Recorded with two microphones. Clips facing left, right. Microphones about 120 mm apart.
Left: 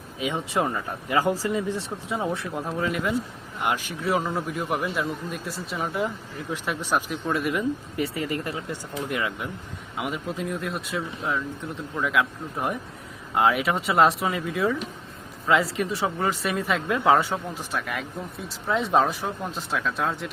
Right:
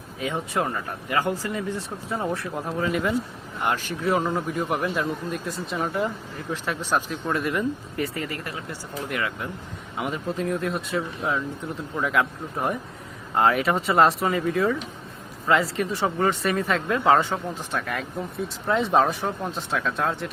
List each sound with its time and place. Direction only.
0.7 s speech: 20° left (ahead or behind)
1.7 s speech: centre (ahead or behind)
3.6 s speech: 10° left (ahead or behind)
4.0 s speech: centre (ahead or behind)
8.3 s speech: 20° left (ahead or behind)
10.0 s speech: 5° left (ahead or behind)